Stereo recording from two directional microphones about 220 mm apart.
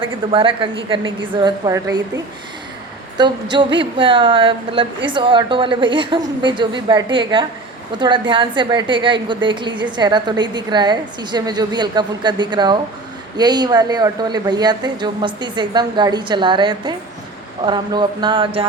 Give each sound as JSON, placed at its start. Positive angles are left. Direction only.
{"t": 0.0, "sound": "a woman's voice", "side_deg": -25}